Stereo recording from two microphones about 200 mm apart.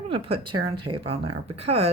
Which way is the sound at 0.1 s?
30° right (ahead or behind).